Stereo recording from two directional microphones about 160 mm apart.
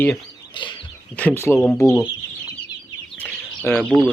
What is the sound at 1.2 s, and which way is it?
Speech, 10° left (ahead or behind).